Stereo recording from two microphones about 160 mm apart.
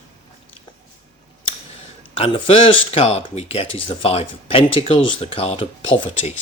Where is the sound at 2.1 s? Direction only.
35° left (ahead or behind).